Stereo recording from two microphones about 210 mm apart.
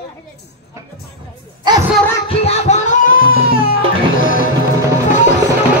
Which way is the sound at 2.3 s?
30° left (ahead or behind).